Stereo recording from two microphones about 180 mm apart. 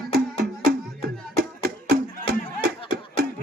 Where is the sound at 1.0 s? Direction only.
60° right (ahead or behind).